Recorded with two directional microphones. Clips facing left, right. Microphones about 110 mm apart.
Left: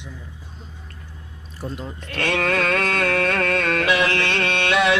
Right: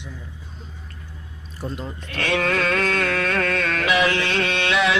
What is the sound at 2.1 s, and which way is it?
Music, 50° left (ahead or behind).